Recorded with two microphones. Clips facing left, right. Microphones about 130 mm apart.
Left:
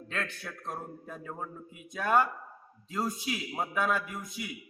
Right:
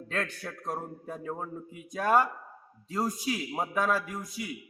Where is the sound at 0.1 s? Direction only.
40° right (ahead or behind).